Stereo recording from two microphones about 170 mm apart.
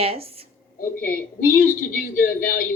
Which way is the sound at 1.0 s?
60° left (ahead or behind).